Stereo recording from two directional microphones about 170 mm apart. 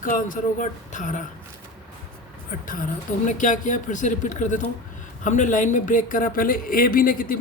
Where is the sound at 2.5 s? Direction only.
55° left (ahead or behind).